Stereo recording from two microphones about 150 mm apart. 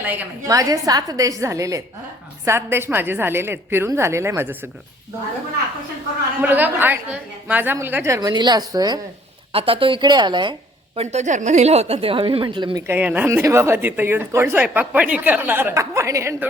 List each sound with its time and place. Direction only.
0.0 s a woman's voice: 10° right (ahead or behind)
0.5 s a woman's voice: 25° right (ahead or behind)
6.4 s a woman's voice: 10° right (ahead or behind)
9.5 s speech: 40° right (ahead or behind)
10.9 s speech: 50° right (ahead or behind); by 12.8 s 35° right (ahead or behind)
12.9 s a woman's voice: 10° right (ahead or behind)